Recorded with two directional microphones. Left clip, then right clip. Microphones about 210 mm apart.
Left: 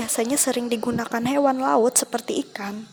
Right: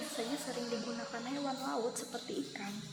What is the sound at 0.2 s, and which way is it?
Speech, 50° left (ahead or behind).